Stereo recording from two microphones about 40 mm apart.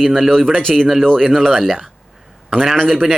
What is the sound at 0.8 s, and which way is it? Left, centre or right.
Speech, centre.